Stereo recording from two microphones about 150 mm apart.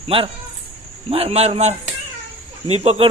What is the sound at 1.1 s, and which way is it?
Speech, 40° right (ahead or behind).